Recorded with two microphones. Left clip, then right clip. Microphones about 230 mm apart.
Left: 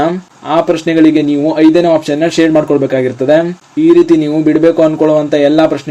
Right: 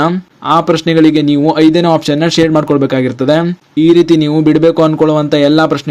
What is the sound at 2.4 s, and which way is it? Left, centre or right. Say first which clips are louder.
Speech: left 2 dB; right.